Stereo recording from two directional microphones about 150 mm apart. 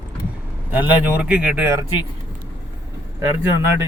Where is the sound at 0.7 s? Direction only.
10° right (ahead or behind).